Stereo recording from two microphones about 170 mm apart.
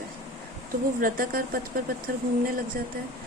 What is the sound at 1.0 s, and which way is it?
Speech, 55° right (ahead or behind).